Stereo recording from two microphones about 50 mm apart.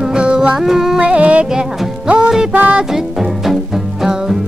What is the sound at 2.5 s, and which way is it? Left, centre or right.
Music, right.